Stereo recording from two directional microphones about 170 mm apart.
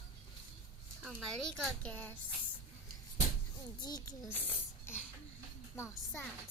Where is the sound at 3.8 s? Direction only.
25° left (ahead or behind).